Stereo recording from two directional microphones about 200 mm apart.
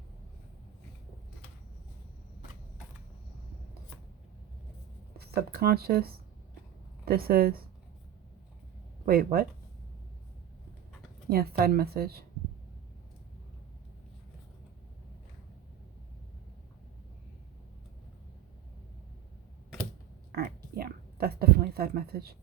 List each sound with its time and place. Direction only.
5.1 s speech: 50° right (ahead or behind)
9.0 s a woman's voice: 50° right (ahead or behind)
11.3 s a woman's voice: 50° right (ahead or behind)
20.3 s a sound: 50° right (ahead or behind)